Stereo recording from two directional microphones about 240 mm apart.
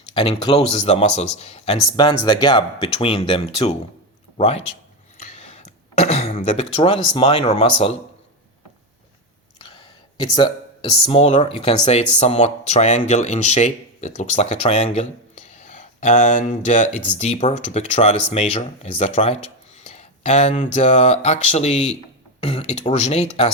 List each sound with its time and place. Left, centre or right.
0.1 s speech: left
5.1 s a sound: left
10.2 s speech: centre